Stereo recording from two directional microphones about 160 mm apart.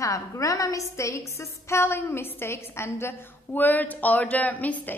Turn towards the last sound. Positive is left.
turn(degrees=10)  # may be behind; listen again after turning